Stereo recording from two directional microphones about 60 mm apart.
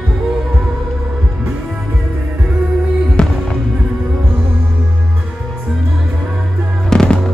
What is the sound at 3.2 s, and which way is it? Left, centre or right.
Music, centre.